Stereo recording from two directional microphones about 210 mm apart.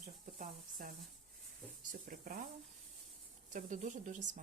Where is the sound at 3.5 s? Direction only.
35° right (ahead or behind).